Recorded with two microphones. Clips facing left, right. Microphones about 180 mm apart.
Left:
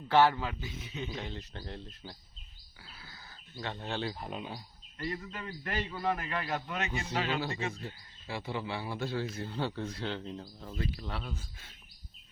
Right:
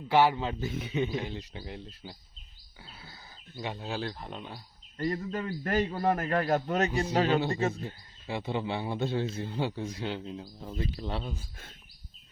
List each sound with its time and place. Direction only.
0.1 s speech: 15° right (ahead or behind)
0.6 s a man's voice: 60° right (ahead or behind)
1.1 s speech: 10° right (ahead or behind)
2.8 s a sound: 25° right (ahead or behind)
3.8 s speech: 5° right (ahead or behind)
4.9 s a man's voice: 45° right (ahead or behind)
8.3 s a man's voice: 20° right (ahead or behind)
10.9 s a man's voice: 25° right (ahead or behind)